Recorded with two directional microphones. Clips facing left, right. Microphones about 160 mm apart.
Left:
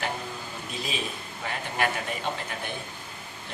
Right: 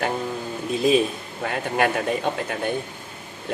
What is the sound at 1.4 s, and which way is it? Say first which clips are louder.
Speech: right 7 dB; 55° right (ahead or behind).